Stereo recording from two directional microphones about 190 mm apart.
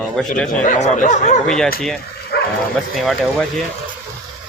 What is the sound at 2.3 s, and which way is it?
Bow-wow, 55° left (ahead or behind).